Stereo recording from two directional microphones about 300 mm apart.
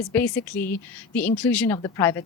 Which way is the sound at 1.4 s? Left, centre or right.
Centre.